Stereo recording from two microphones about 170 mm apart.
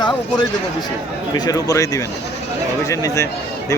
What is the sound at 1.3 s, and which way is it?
A man's voice, 20° left (ahead or behind).